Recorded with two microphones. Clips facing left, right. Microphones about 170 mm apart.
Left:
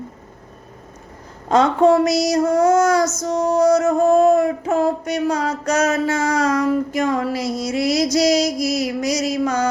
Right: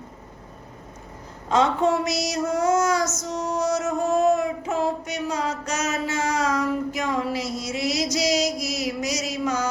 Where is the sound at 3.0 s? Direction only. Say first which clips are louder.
Left 7 dB; 35° left (ahead or behind).